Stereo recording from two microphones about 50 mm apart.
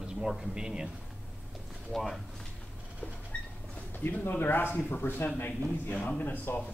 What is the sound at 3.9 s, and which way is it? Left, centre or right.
Speech, left.